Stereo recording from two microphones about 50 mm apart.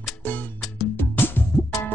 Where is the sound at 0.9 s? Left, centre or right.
Left.